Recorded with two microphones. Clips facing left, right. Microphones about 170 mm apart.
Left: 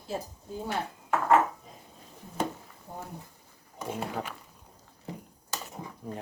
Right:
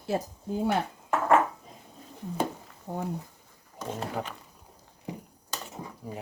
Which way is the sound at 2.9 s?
80° right.